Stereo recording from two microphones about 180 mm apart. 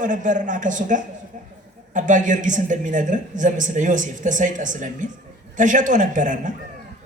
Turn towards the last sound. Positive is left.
turn(degrees=-45)  # may be behind; listen again after turning